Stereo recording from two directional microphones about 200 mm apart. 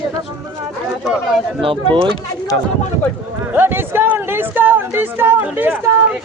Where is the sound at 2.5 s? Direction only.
60° right (ahead or behind).